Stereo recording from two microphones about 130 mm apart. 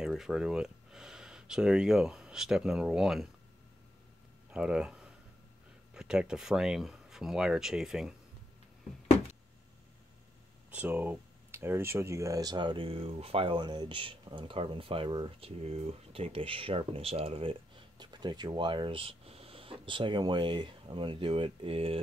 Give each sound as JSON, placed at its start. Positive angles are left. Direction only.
{"t": 0.0, "sound": "speech", "side_deg": -5}
{"t": 4.5, "sound": "speech", "side_deg": -5}
{"t": 10.7, "sound": "speech", "side_deg": -10}